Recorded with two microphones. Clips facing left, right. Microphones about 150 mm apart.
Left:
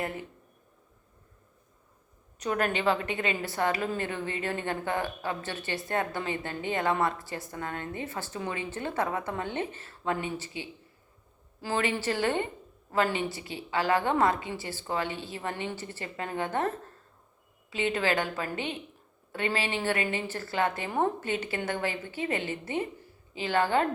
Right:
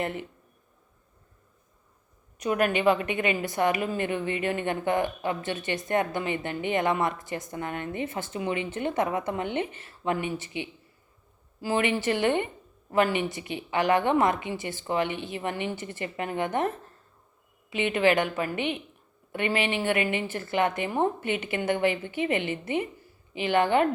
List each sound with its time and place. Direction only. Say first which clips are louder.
0.0 s a woman's voice: right 3 dB; 25° right (ahead or behind)
2.4 s a woman's voice: right 4 dB; 15° right (ahead or behind)